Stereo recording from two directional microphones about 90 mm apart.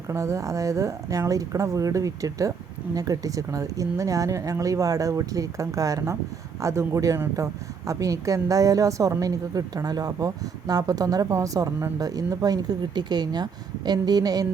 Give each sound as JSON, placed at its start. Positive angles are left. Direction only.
{"t": 0.1, "sound": "a woman's voice", "side_deg": -35}